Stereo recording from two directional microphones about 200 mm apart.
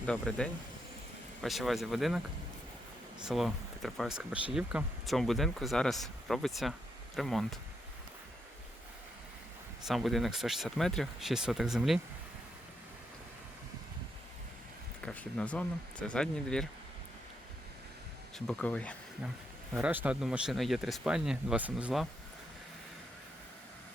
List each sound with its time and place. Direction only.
0.0 s speech: 5° left (ahead or behind)
9.8 s speech: centre (ahead or behind)
15.0 s speech: 5° left (ahead or behind)
18.3 s speech: 5° left (ahead or behind)
19.7 s speech: 5° right (ahead or behind)